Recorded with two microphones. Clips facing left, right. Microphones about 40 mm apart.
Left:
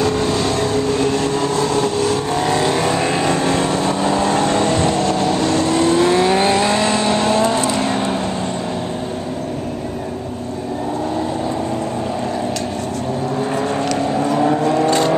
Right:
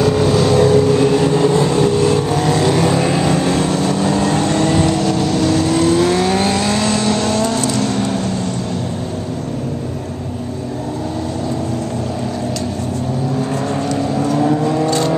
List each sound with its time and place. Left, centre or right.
0.0 s vehicle: centre
2.3 s vehicle: centre
14.4 s vehicle: centre